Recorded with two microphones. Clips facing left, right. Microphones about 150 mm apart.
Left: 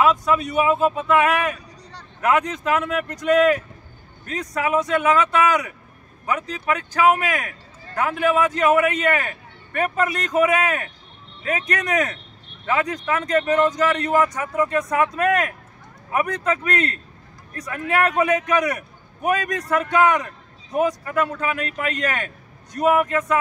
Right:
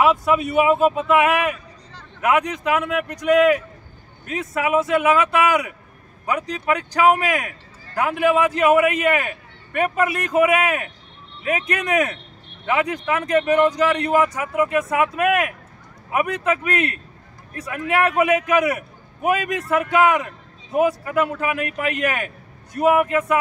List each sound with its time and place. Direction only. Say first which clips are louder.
0.0 s speech: right 1 dB; 10° right (ahead or behind)
0.5 s speech: right 4 dB; 20° right (ahead or behind)